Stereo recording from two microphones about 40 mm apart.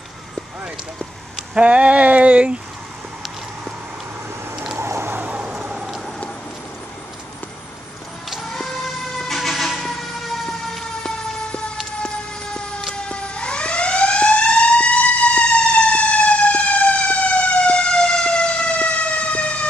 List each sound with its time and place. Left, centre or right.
1.5 s a sound: right
5.1 s vehicle: right
5.4 s vehicle: centre
9.2 s emergency vehicle: centre
11.0 s vehicle: centre
12.9 s siren: left
17.9 s fire engine: centre; by 19.5 s left